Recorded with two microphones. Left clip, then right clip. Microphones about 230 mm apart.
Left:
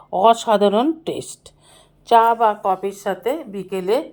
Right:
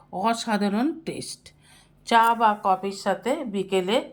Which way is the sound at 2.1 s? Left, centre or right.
Left.